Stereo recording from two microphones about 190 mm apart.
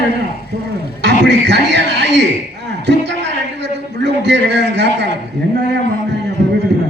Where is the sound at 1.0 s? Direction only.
65° right (ahead or behind).